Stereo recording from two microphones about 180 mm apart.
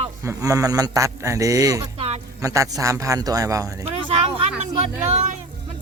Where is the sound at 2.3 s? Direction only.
15° right (ahead or behind).